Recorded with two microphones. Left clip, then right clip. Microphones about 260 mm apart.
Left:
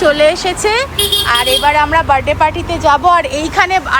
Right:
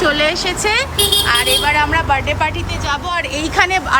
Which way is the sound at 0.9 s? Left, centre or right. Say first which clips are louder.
Left 1 dB; right.